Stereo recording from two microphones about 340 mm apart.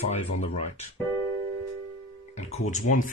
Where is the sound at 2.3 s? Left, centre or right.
Left.